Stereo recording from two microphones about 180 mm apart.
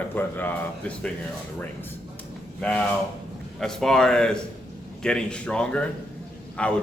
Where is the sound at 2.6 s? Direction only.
5° left (ahead or behind).